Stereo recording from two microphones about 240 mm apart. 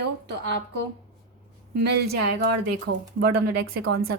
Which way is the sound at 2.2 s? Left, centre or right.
Right.